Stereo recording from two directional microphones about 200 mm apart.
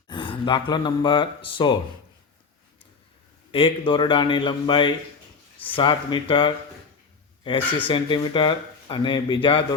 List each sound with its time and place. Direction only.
0.1 s speech: 25° left (ahead or behind)
3.5 s speech: 25° left (ahead or behind)
7.9 s speech: 25° left (ahead or behind)